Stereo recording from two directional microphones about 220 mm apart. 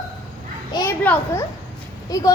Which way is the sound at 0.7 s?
15° left (ahead or behind).